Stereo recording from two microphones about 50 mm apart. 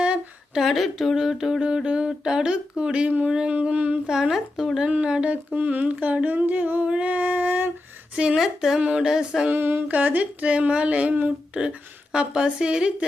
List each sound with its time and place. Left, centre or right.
0.5 s speech: centre
1.6 s a woman's voice: centre
4.1 s speech: centre
4.9 s a woman's voice: right
5.1 s humming: right
8.1 s speech: centre
8.8 s a woman's voice: right
9.0 s speech: centre
9.5 s a sound: right
9.9 s a woman's voice: right